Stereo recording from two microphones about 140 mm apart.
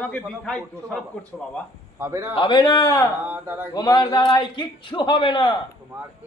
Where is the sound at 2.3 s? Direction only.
35° left (ahead or behind).